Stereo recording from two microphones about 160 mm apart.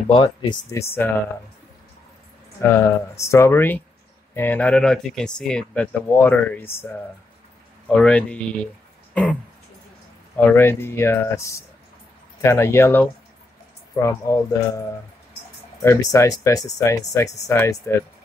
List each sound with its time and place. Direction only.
0.1 s speech: 30° left (ahead or behind)
0.7 s speech: 15° left (ahead or behind)
2.7 s speech: 15° left (ahead or behind)